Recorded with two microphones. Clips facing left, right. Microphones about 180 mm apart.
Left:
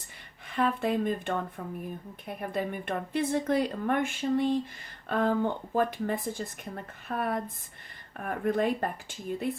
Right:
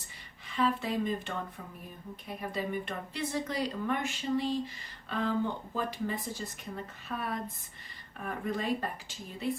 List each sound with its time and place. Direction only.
0.4 s a woman's voice: 55° left (ahead or behind)